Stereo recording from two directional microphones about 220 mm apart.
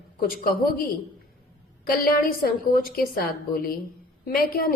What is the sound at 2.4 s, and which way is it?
A woman's voice, 45° left (ahead or behind).